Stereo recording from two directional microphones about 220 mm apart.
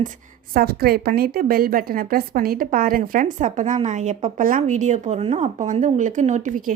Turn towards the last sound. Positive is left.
turn(degrees=-35)  # may be behind; listen again after turning